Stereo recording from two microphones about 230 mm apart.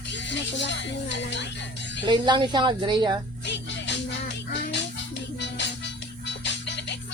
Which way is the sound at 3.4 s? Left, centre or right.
Left.